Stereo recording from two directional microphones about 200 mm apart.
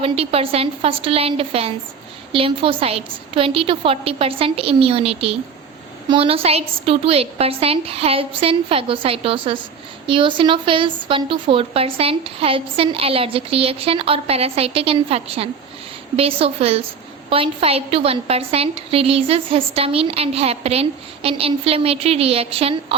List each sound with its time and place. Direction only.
0.0 s a woman's voice: 30° right (ahead or behind)